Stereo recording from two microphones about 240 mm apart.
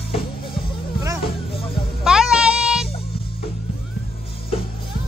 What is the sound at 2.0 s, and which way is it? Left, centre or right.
Music, centre.